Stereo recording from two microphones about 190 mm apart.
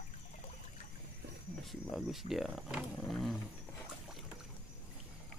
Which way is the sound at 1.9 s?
Centre (ahead or behind).